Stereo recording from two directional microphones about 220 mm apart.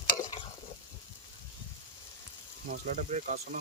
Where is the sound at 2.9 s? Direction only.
35° right (ahead or behind).